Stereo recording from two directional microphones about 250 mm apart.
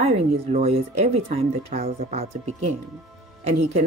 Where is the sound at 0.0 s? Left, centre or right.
Right.